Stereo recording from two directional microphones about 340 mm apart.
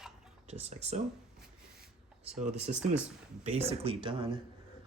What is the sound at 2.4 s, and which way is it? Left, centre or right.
Speech, right.